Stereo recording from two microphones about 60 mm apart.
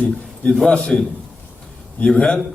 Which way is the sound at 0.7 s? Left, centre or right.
Centre.